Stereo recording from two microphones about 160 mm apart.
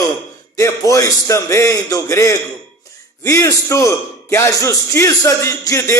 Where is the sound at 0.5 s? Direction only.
20° left (ahead or behind).